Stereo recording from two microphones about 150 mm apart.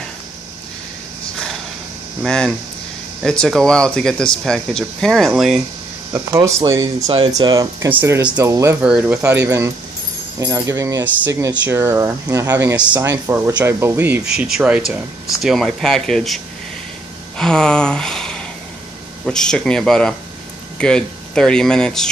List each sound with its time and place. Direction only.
2.2 s speech: 5° left (ahead or behind)
6.1 s speech: 20° right (ahead or behind)
7.9 s speech: 15° right (ahead or behind)
8.5 s speech: 20° right (ahead or behind)
8.8 s speech: 10° right (ahead or behind)
10.4 s speech: 20° right (ahead or behind)
12.7 s speech: 10° right (ahead or behind)
17.4 s a sound: 5° left (ahead or behind)
19.2 s speech: 5° left (ahead or behind)